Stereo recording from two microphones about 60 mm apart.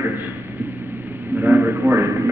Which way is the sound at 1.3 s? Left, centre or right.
Right.